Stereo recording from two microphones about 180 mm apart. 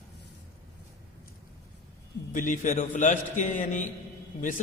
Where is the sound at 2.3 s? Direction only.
45° left (ahead or behind).